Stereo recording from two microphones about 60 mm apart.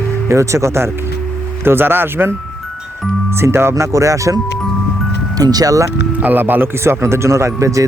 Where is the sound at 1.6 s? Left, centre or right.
Right.